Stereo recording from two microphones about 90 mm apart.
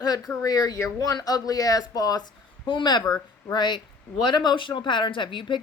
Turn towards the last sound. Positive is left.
turn(degrees=65)  # may be behind; listen again after turning